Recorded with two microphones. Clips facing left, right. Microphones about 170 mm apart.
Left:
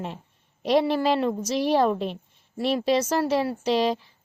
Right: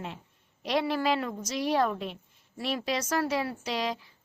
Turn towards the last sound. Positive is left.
turn(degrees=25)  # may be behind; listen again after turning